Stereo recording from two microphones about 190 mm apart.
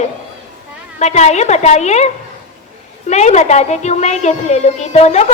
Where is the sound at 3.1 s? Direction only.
35° left (ahead or behind).